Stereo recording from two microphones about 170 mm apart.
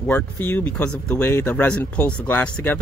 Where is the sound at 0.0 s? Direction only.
10° left (ahead or behind).